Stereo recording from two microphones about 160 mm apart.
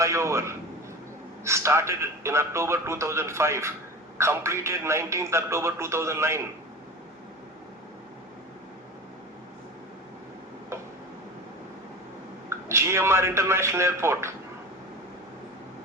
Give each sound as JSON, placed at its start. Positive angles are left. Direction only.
{"t": 0.0, "sound": "a man's voice", "side_deg": -20}
{"t": 12.5, "sound": "a man's voice", "side_deg": -15}